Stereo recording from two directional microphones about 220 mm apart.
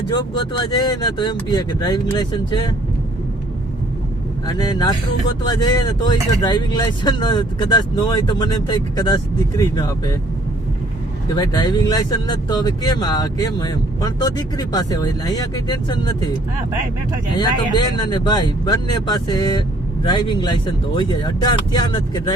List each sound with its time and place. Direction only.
0.2 s speech: 20° left (ahead or behind)
4.4 s speech: 20° left (ahead or behind)
11.3 s speech: 20° left (ahead or behind)
17.3 s speech: 20° left (ahead or behind)